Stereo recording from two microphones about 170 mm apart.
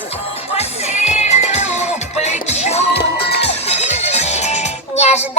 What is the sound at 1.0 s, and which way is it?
Music, 40° left (ahead or behind).